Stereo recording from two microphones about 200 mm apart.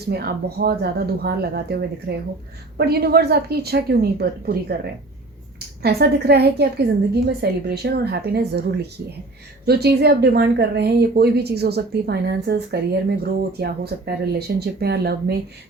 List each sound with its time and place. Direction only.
0.1 s a woman's voice: 50° right (ahead or behind)